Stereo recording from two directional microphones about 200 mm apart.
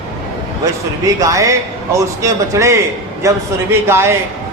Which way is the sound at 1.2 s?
15° right (ahead or behind).